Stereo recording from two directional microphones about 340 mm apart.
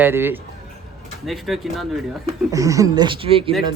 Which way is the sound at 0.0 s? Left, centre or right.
Centre.